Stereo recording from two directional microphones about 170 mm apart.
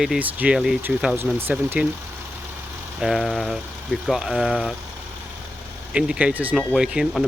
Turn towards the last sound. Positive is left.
turn(degrees=0)  # may be behind; listen again after turning